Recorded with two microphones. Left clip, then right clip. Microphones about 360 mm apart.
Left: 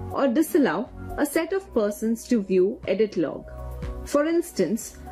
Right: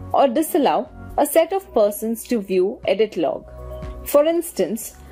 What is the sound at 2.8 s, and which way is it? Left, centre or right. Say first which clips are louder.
Speech: right 5 dB; centre.